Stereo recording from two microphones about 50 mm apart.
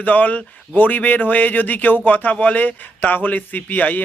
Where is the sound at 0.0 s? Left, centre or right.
Left.